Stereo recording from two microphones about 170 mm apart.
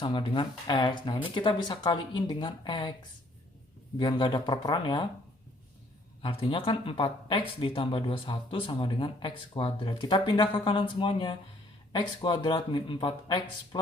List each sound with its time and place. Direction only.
0.0 s speech: 30° left (ahead or behind)
3.9 s speech: 25° left (ahead or behind)
6.2 s speech: 30° left (ahead or behind)